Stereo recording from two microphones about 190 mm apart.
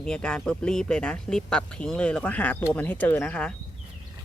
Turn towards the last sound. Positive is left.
turn(degrees=5)  # may be behind; listen again after turning